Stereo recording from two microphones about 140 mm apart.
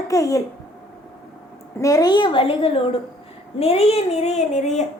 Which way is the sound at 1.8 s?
25° left (ahead or behind).